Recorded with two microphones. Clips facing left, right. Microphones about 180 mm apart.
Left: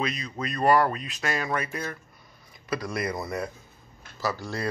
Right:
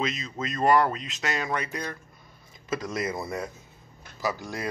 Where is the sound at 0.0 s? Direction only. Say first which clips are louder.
Even; 20° right (ahead or behind).